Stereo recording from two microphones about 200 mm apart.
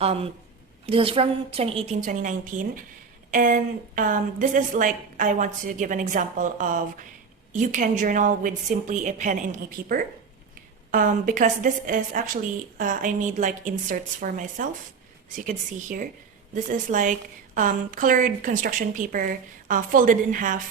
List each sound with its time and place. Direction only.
0.0 s a woman's voice: 30° right (ahead or behind)